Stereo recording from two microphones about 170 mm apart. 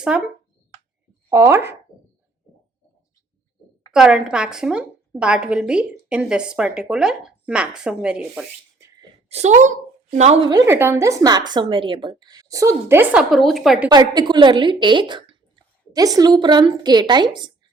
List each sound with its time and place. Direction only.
1.3 s speech: 15° right (ahead or behind)
3.9 s a woman's voice: 5° right (ahead or behind)
9.3 s speech: 40° right (ahead or behind)
10.7 s a woman's voice: 15° right (ahead or behind)
13.9 s a woman's voice: 25° right (ahead or behind)